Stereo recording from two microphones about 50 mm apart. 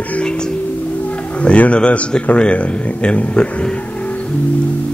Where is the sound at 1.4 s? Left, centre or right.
Left.